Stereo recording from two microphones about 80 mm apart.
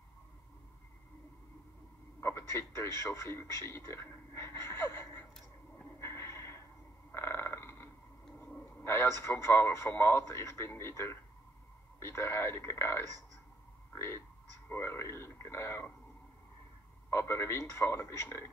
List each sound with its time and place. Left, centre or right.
2.1 s radio: left
5.9 s a sound: left
8.8 s a man's voice: left
17.1 s a man's voice: left